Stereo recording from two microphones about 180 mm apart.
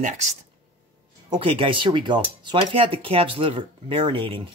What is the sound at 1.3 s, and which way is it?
Speech, 30° right (ahead or behind).